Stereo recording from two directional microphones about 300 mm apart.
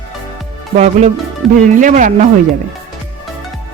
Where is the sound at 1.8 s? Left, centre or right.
Right.